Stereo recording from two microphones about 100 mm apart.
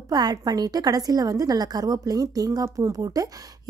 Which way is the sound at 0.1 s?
40° right (ahead or behind).